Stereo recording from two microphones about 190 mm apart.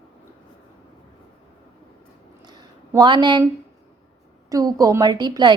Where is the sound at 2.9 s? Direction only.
25° right (ahead or behind).